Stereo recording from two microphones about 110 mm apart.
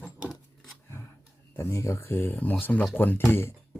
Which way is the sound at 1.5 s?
25° left (ahead or behind).